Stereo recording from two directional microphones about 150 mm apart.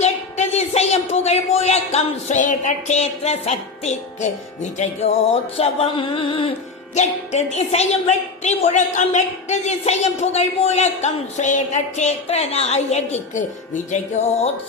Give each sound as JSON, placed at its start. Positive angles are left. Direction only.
{"t": 0.0, "sound": "a woman's voice", "side_deg": 50}
{"t": 4.8, "sound": "music", "side_deg": 45}
{"t": 6.9, "sound": "a woman's voice", "side_deg": 50}